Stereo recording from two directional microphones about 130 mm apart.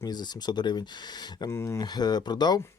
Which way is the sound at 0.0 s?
30° left (ahead or behind).